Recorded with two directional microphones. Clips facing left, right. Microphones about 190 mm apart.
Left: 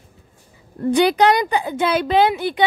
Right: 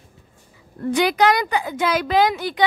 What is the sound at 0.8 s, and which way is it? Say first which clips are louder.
A woman's voice: left 3 dB; 30° left (ahead or behind).